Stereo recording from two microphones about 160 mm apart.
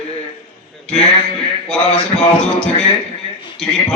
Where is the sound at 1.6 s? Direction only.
5° left (ahead or behind).